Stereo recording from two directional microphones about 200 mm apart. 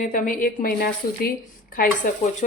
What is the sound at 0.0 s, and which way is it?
A woman's voice, 40° left (ahead or behind).